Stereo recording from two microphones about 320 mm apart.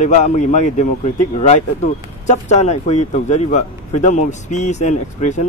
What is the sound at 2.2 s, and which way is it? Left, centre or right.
Speech, left.